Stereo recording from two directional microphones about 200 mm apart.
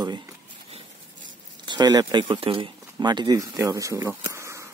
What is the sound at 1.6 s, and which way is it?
Speech, 20° right (ahead or behind).